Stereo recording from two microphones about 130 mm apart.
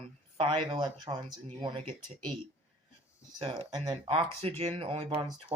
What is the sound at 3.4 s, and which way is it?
Speech, 40° right (ahead or behind).